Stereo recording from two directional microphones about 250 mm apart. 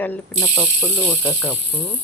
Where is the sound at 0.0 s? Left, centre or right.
Centre.